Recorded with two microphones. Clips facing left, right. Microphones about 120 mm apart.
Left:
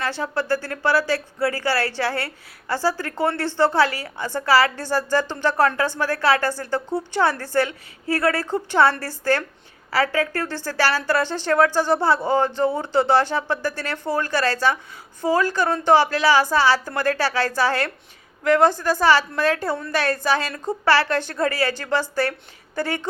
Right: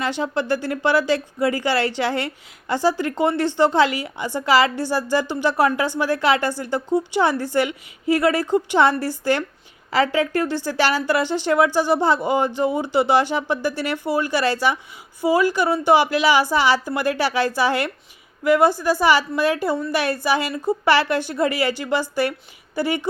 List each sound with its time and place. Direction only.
0.0 s speech: 20° right (ahead or behind)